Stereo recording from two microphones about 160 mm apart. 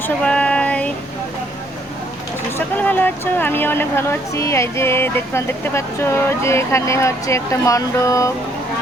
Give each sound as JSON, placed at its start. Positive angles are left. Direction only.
{"t": 0.2, "sound": "female singing", "side_deg": 5}
{"t": 2.6, "sound": "speech", "side_deg": 10}